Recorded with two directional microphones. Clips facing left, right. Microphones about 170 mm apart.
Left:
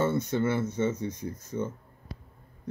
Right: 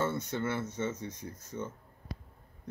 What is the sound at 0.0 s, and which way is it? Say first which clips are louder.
Speech: left 6 dB; 15° left (ahead or behind).